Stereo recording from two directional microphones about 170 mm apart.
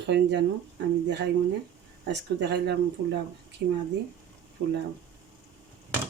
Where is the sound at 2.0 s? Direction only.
90° right.